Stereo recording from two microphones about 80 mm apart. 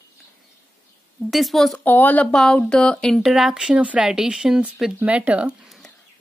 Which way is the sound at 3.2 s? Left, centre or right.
Centre.